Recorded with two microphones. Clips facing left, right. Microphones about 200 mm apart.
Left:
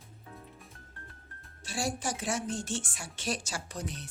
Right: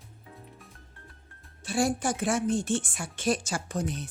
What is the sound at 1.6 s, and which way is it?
Speech, 55° right (ahead or behind).